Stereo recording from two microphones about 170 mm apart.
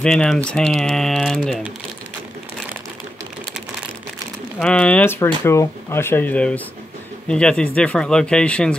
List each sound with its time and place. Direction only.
0.0 s speech: 5° left (ahead or behind)
4.6 s speech: 5° left (ahead or behind)